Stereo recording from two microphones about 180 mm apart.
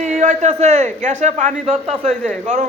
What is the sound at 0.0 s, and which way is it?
A man's voice, 45° right (ahead or behind).